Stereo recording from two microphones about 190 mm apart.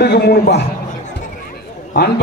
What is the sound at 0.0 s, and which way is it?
Speech, 60° left (ahead or behind).